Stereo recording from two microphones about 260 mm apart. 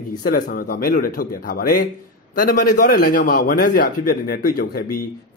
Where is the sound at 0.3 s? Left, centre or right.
Left.